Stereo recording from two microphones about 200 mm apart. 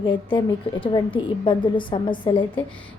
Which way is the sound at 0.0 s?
25° left (ahead or behind).